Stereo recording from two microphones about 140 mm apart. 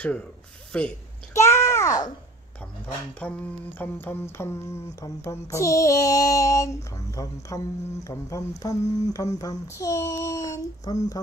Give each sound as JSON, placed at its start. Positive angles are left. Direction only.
{"t": 0.0, "sound": "speech", "side_deg": 10}
{"t": 1.3, "sound": "a sound", "side_deg": 20}
{"t": 3.2, "sound": "speech", "side_deg": 10}
{"t": 5.0, "sound": "child singing", "side_deg": 20}
{"t": 9.1, "sound": "speech", "side_deg": 25}